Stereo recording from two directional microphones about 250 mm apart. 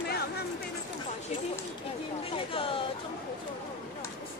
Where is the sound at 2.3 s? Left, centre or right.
Left.